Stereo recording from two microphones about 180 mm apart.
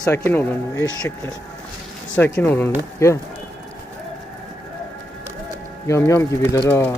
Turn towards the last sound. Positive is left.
turn(degrees=15)  # may be behind; listen again after turning